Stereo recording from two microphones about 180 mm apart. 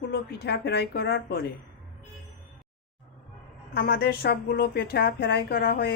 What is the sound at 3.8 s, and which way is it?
A woman's voice, 60° left (ahead or behind).